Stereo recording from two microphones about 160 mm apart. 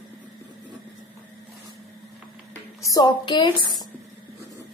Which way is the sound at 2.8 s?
25° left (ahead or behind).